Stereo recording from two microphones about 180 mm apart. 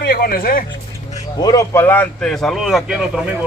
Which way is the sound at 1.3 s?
20° left (ahead or behind).